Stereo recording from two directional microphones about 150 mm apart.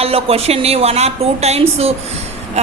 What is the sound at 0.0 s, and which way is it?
A woman's voice, 40° right (ahead or behind).